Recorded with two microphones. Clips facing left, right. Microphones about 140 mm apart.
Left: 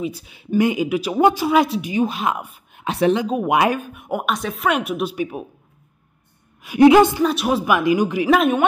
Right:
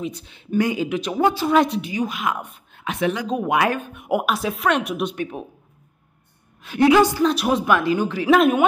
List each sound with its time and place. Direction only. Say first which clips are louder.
0.0 s speech: left 3 dB; 10° left (ahead or behind)
0.6 s a woman's voice: left 3 dB; 20° left (ahead or behind)
0.8 s speech: left 3 dB; 5° left (ahead or behind)
1.9 s a woman's voice: left 4 dB; 25° left (ahead or behind)
2.3 s speech: left 1 dB; 5° left (ahead or behind)
2.8 s a woman's voice: left 5 dB; 30° left (ahead or behind)
3.4 s speech: left 2 dB; 20° left (ahead or behind)
4.0 s speech: right 5 dB; 5° right (ahead or behind)
6.6 s speech: left 6 dB; 10° left (ahead or behind)
6.9 s a woman's voice: even; 25° left (ahead or behind)
7.2 s speech: even; centre (ahead or behind)
8.3 s speech: right 2 dB; centre (ahead or behind)